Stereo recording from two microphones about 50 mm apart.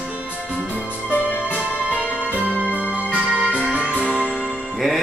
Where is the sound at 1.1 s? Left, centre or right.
Left.